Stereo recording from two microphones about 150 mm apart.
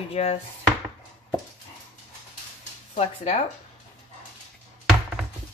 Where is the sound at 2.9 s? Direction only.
45° left (ahead or behind).